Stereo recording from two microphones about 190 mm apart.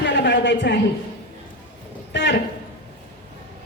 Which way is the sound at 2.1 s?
65° left (ahead or behind).